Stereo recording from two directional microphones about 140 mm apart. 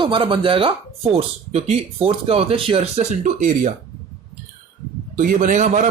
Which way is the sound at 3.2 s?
65° right (ahead or behind).